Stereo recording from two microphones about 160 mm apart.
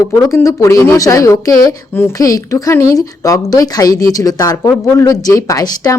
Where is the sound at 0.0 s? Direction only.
20° left (ahead or behind).